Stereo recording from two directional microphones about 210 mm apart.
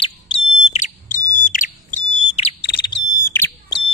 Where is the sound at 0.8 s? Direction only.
35° left (ahead or behind).